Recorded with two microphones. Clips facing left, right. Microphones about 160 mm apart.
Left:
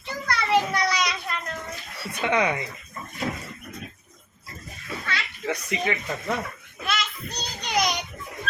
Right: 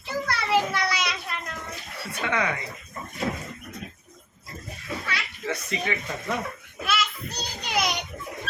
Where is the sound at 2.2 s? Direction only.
20° left (ahead or behind).